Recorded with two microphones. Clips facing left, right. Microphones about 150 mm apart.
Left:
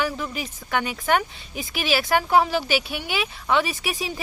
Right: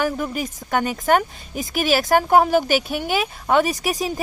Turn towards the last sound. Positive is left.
turn(degrees=-45)  # may be behind; listen again after turning